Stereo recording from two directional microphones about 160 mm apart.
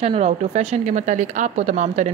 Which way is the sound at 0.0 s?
40° right (ahead or behind).